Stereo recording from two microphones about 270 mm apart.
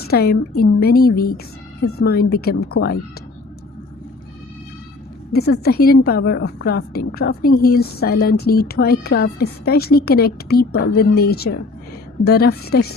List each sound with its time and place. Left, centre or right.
0.1 s speech: left
5.3 s speech: left